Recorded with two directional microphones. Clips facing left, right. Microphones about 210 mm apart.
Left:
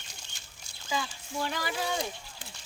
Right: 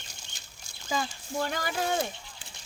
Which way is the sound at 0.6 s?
45° right (ahead or behind).